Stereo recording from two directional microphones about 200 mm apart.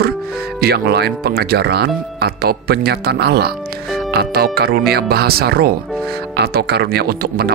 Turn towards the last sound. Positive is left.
turn(degrees=-50)  # may be behind; listen again after turning